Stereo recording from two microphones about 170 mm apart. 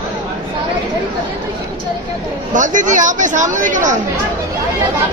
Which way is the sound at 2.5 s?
50° right (ahead or behind).